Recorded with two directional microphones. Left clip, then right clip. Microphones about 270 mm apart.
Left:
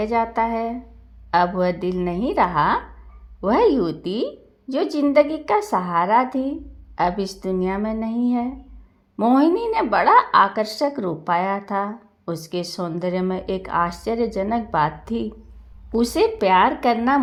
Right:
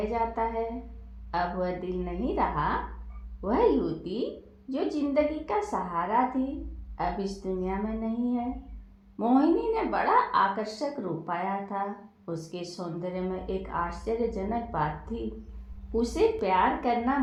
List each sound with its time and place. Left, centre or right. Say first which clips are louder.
0.0 s a woman's voice: left 8 dB; left